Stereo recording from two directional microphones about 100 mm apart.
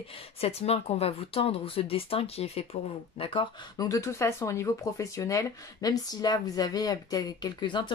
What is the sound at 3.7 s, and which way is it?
Speech, 35° left (ahead or behind).